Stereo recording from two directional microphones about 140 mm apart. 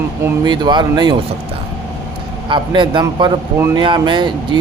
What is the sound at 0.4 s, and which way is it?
Speech, 30° right (ahead or behind).